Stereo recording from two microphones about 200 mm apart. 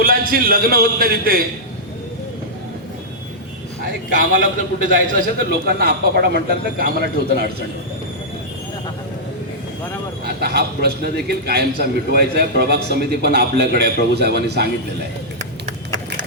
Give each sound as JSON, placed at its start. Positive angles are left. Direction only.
{"t": 0.0, "sound": "a man's voice", "side_deg": -45}
{"t": 4.8, "sound": "a man's voice", "side_deg": -45}
{"t": 10.2, "sound": "a man's voice", "side_deg": -55}